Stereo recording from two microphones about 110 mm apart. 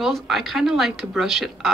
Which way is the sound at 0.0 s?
Centre (ahead or behind).